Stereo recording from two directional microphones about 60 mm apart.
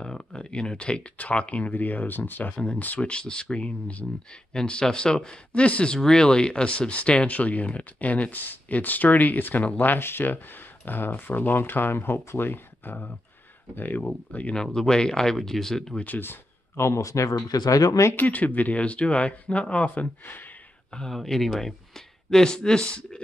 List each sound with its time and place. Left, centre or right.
0.0 s speech: centre; by 2.5 s left
2.5 s speech: centre
2.8 s speech: left
3.1 s speech: centre
14.6 s speech: centre
16.2 s speech: left
17.0 s speech: left
18.1 s speech: left
21.1 s speech: centre